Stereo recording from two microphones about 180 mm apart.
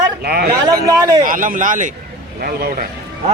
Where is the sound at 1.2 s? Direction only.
50° right (ahead or behind).